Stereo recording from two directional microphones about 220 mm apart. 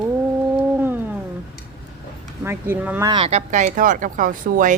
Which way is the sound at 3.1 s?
25° right (ahead or behind).